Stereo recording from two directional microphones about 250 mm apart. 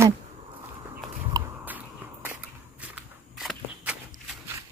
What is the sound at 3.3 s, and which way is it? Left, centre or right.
Walk, centre.